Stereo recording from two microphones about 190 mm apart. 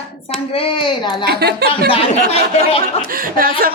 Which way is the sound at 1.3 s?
60° right (ahead or behind).